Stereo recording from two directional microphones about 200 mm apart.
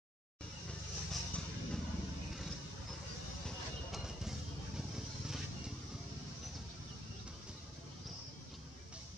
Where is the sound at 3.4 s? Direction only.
Centre (ahead or behind).